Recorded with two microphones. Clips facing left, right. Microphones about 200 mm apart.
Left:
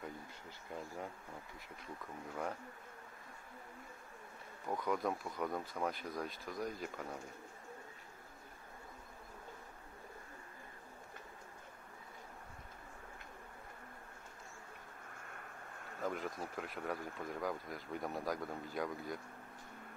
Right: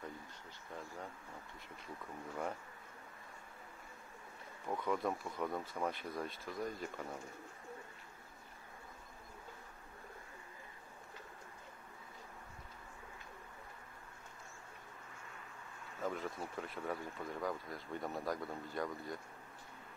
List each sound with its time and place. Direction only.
4.6 s speech: centre (ahead or behind)
15.1 s a sound: 55° left (ahead or behind)
16.0 s speech: centre (ahead or behind)